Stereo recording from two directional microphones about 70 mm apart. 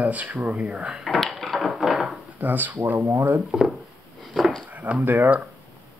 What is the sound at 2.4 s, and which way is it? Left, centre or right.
Speech, right.